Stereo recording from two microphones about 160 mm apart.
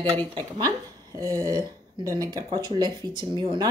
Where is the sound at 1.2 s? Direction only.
20° right (ahead or behind).